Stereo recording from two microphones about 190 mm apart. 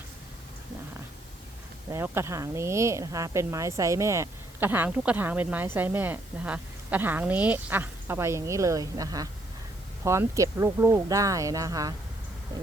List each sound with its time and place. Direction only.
1.9 s speech: 15° right (ahead or behind)